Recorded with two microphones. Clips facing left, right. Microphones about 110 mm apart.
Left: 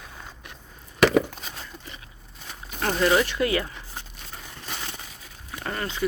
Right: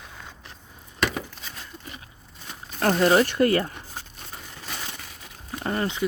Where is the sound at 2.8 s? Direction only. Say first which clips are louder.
Right 3 dB; 45° right (ahead or behind).